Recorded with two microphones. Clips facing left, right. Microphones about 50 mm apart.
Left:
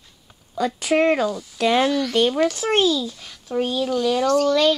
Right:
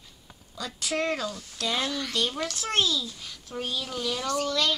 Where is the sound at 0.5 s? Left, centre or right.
Left.